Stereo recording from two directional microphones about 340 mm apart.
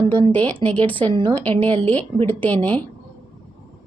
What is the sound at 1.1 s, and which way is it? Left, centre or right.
Speech, centre.